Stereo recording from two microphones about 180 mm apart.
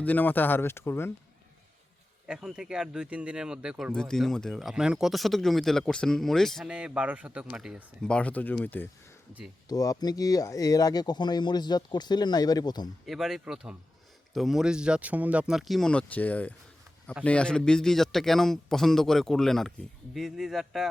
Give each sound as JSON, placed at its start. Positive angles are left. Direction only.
{"t": 0.0, "sound": "speech", "side_deg": 10}
{"t": 2.2, "sound": "speech", "side_deg": -5}
{"t": 9.6, "sound": "speech", "side_deg": 20}
{"t": 13.1, "sound": "speech", "side_deg": 0}